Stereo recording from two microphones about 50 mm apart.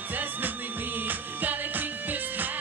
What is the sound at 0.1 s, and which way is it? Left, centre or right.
Music, right.